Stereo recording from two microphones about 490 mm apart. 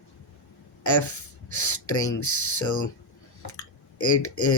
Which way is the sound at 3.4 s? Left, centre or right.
Left.